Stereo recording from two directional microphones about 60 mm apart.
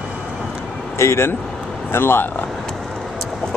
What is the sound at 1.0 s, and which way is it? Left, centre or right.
Speech, left.